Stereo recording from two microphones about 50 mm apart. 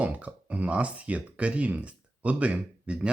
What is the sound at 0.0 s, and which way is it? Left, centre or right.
Speech, right.